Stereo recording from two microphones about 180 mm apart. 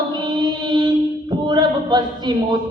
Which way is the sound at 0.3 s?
25° right (ahead or behind).